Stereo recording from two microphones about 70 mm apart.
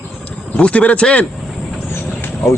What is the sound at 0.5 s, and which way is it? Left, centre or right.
Speech, centre.